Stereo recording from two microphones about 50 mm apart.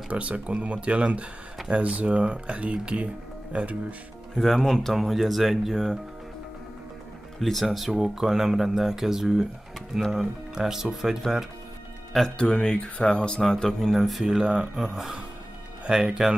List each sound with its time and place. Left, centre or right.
0.1 s speech: right
4.4 s speech: centre
4.9 s speech: centre
7.3 s speech: centre
12.4 s speech: centre